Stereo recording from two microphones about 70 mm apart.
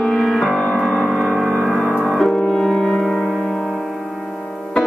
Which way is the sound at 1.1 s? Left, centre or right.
Centre.